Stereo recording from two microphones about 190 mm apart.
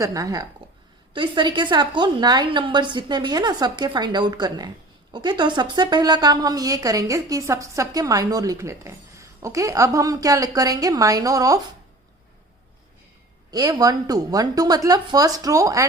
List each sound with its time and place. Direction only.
0.0 s a woman's voice: 20° right (ahead or behind)
13.5 s a woman's voice: 20° right (ahead or behind)